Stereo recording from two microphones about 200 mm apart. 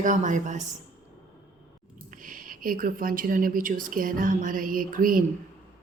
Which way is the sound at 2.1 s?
40° right (ahead or behind).